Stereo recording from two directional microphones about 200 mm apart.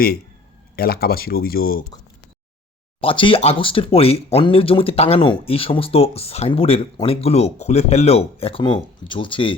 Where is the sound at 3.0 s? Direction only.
25° left (ahead or behind).